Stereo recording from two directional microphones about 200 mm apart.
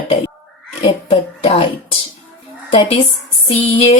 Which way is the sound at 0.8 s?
25° left (ahead or behind).